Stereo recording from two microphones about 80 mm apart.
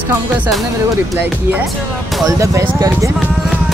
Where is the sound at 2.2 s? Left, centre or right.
Right.